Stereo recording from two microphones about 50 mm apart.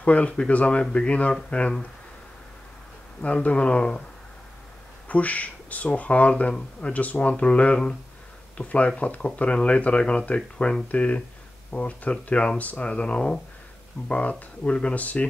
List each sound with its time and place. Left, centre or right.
0.0 s speech: left
3.4 s speech: left
5.0 s speech: left